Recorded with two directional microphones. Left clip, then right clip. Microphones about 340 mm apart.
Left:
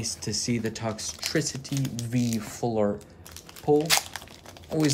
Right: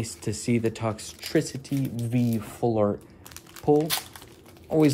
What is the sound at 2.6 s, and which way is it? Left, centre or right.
Speech, right.